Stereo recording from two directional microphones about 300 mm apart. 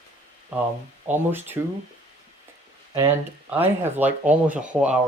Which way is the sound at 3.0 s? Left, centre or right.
Centre.